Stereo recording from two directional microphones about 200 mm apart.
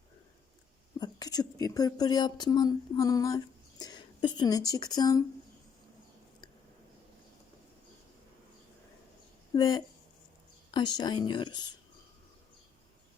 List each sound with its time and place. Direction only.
0.9 s a woman's voice: 20° left (ahead or behind)
9.6 s a woman's voice: 20° left (ahead or behind)